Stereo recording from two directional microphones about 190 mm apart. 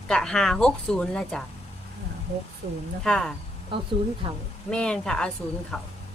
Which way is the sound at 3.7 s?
25° right (ahead or behind).